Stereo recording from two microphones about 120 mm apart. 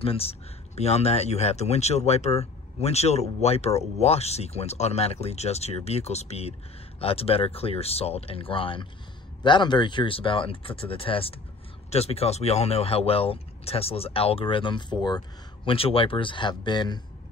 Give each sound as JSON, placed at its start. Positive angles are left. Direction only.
{"t": 0.0, "sound": "speech", "side_deg": 55}
{"t": 15.7, "sound": "speech", "side_deg": 50}